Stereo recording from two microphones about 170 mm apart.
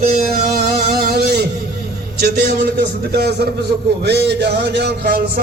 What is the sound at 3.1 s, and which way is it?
Speech, 70° right (ahead or behind).